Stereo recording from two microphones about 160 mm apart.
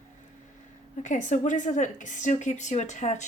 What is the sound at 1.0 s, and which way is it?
Speech, 50° left (ahead or behind).